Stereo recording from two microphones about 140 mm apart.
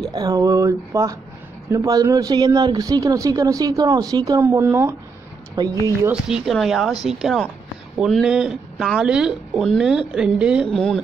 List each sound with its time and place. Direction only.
0.1 s speech: 25° right (ahead or behind)
5.6 s speech: 25° right (ahead or behind)
6.2 s speech: 5° right (ahead or behind)
10.7 s speech: 5° left (ahead or behind)